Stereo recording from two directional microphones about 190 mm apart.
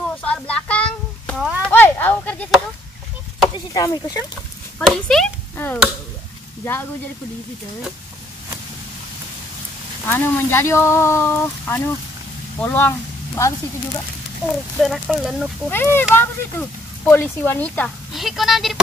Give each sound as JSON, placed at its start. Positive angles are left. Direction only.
{"t": 0.2, "sound": "a sound", "side_deg": 5}
{"t": 1.6, "sound": "chop", "side_deg": 10}
{"t": 3.5, "sound": "speech", "side_deg": 20}
{"t": 4.7, "sound": "speech", "side_deg": 5}
{"t": 10.0, "sound": "speech", "side_deg": 10}
{"t": 14.8, "sound": "speech", "side_deg": 0}
{"t": 15.7, "sound": "speech", "side_deg": 10}